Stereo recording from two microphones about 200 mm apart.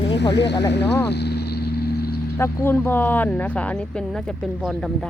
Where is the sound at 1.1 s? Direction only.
55° left (ahead or behind).